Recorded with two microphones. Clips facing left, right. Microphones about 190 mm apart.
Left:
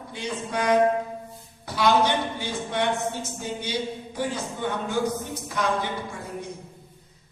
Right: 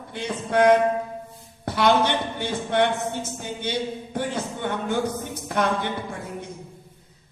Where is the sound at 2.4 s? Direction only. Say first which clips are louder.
Right 4 dB; 55° right (ahead or behind).